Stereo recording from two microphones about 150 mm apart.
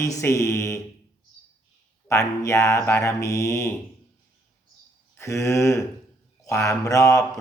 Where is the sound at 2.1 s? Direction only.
20° left (ahead or behind).